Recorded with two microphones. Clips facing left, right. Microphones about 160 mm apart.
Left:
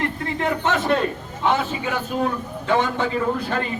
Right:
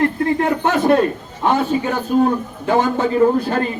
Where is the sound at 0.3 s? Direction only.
50° right (ahead or behind).